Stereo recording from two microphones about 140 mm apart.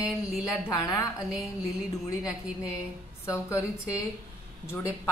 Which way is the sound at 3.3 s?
20° left (ahead or behind).